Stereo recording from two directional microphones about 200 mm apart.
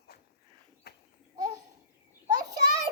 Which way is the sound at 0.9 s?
55° left (ahead or behind).